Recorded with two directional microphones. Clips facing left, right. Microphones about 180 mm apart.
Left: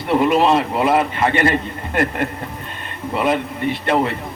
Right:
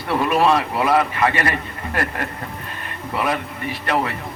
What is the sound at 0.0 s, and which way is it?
A man's voice, 20° left (ahead or behind).